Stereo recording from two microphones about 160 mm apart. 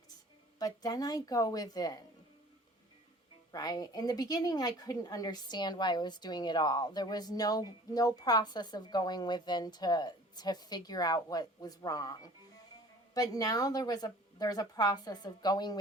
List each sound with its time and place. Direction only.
0.6 s a woman's voice: 25° left (ahead or behind)
3.5 s a woman's voice: 25° left (ahead or behind)